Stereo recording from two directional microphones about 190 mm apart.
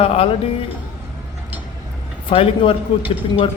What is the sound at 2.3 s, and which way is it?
A man's voice, 25° left (ahead or behind).